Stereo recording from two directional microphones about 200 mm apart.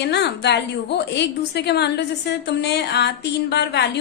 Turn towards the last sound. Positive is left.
turn(degrees=55)  # may be behind; listen again after turning